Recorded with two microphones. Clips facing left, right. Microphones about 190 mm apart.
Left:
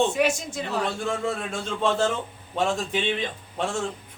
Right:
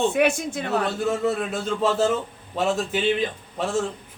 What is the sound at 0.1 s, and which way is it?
Speech, 55° right (ahead or behind).